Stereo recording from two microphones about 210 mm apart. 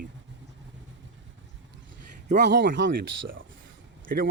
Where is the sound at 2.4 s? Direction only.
50° right (ahead or behind).